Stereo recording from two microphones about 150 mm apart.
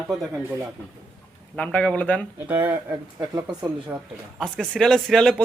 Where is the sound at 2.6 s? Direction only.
20° right (ahead or behind).